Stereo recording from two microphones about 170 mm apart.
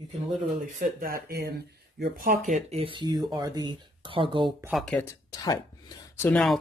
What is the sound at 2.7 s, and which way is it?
Speech, 30° right (ahead or behind).